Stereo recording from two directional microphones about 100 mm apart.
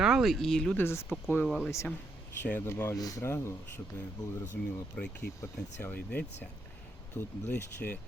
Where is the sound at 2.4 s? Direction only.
20° left (ahead or behind).